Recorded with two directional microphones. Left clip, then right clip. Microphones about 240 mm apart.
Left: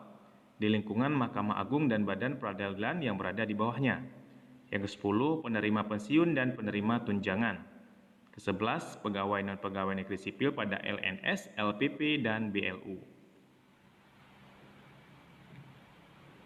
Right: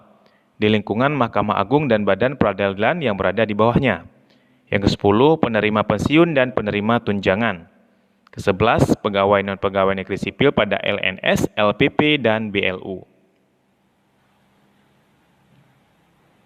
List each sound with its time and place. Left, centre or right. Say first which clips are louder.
0.6 s speech: right 14 dB; right